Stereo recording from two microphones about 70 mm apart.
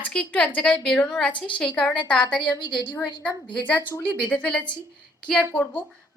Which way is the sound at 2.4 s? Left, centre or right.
Left.